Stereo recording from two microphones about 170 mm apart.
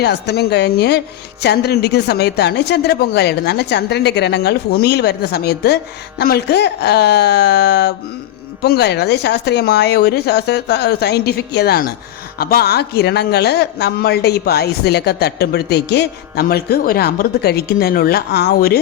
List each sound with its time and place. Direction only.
0.0 s speech: 75° left (ahead or behind)